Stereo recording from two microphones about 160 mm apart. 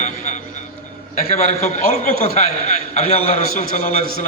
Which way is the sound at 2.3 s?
45° left (ahead or behind).